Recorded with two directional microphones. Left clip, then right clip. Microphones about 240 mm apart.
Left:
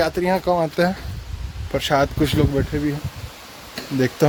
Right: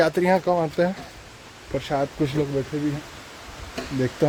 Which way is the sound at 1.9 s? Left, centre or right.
Left.